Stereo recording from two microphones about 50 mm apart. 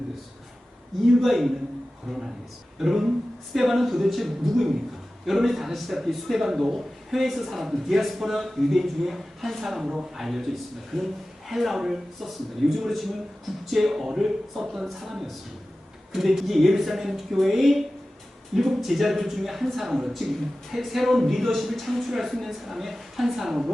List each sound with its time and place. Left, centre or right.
1.2 s a man's voice: centre
2.7 s a man's voice: centre
9.8 s speech: centre
10.2 s a man's voice: centre